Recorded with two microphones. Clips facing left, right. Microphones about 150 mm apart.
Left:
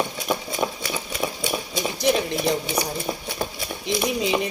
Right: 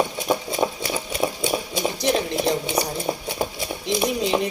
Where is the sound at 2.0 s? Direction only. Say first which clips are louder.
Left 2 dB; 5° left (ahead or behind).